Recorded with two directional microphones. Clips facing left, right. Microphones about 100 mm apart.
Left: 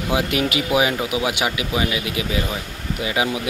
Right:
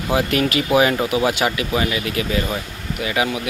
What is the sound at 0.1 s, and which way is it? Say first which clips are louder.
Speech: right 3 dB; 10° left (ahead or behind).